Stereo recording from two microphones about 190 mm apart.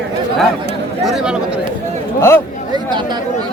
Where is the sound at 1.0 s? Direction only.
5° right (ahead or behind).